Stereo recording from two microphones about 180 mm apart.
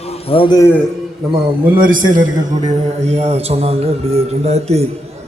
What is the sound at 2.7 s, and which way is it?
Speech, 40° right (ahead or behind).